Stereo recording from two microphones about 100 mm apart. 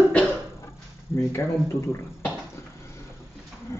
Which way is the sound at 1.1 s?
25° left (ahead or behind).